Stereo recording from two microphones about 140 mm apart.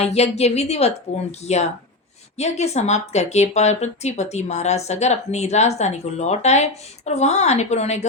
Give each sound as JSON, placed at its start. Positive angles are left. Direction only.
{"t": 0.0, "sound": "speech", "side_deg": 50}